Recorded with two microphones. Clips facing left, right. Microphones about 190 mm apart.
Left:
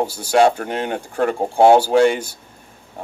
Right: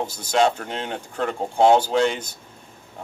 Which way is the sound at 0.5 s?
55° left (ahead or behind).